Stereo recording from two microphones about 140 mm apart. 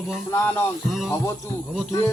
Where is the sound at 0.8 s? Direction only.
Centre (ahead or behind).